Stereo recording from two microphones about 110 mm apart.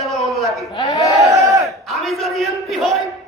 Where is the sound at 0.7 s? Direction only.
35° left (ahead or behind).